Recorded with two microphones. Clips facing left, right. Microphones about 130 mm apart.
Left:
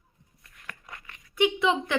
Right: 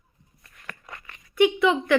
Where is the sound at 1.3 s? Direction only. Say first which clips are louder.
Right 4 dB; 20° left (ahead or behind).